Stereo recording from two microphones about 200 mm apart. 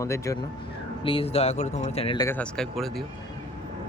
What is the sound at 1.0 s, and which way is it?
Speech, 30° left (ahead or behind).